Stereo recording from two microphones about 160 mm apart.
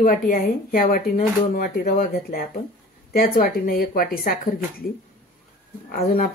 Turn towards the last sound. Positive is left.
turn(degrees=60)  # may be behind; listen again after turning